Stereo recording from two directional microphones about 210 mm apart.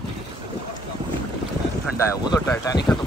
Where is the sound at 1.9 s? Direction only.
15° left (ahead or behind).